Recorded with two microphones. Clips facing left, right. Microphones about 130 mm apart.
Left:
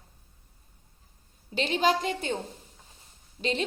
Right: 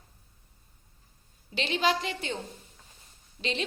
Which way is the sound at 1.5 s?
45° left (ahead or behind).